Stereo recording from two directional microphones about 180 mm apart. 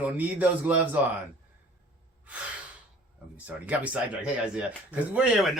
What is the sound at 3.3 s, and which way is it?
A man's voice, 10° right (ahead or behind).